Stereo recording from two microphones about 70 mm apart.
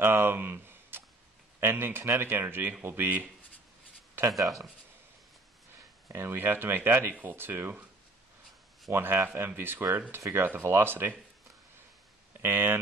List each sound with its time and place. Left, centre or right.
0.0 s a sound: right
1.6 s speech: right
4.3 s speech: centre
6.0 s speech: right
8.9 s speech: right
12.4 s speech: right